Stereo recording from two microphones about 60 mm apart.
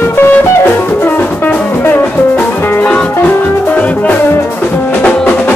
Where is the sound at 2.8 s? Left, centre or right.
Centre.